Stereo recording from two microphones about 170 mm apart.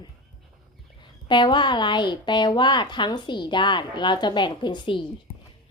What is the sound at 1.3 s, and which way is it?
Speech, 25° left (ahead or behind).